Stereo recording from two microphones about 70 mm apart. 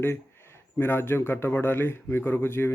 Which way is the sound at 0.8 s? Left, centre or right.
Left.